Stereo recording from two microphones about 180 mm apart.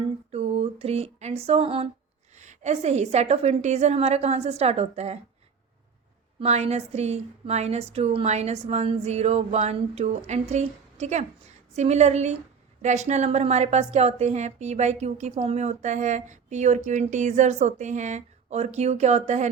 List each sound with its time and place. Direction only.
0.3 s a sound: 35° right (ahead or behind)
2.3 s a woman's voice: 40° right (ahead or behind)
6.4 s a woman's voice: 35° right (ahead or behind)